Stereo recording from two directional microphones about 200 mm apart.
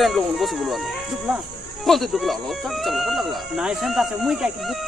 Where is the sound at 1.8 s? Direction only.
Centre (ahead or behind).